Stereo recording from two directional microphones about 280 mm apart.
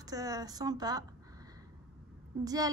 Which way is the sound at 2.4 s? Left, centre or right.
Centre.